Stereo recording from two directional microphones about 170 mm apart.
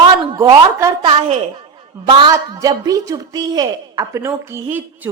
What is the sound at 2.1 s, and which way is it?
A woman's voice, 25° right (ahead or behind).